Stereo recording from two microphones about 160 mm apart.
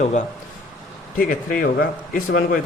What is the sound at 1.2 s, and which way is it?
Speech, 60° left (ahead or behind).